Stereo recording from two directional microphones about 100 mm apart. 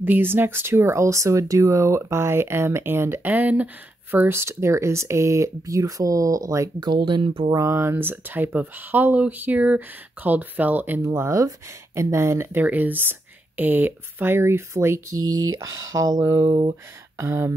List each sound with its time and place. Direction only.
0.0 s speech: 20° right (ahead or behind)
6.8 s speech: 50° right (ahead or behind)
7.5 s speech: 30° right (ahead or behind)
11.0 s speech: 30° right (ahead or behind)